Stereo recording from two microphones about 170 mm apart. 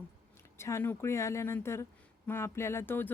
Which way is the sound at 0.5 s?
15° left (ahead or behind).